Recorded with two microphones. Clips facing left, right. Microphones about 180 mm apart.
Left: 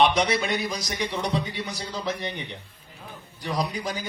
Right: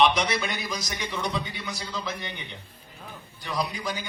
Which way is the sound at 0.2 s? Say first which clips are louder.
Left 4 dB; 35° left (ahead or behind).